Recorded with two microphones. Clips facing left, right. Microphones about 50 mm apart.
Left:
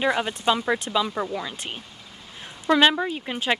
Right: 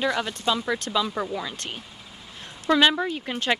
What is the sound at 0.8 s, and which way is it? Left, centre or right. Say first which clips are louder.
Speech: left 1 dB; centre.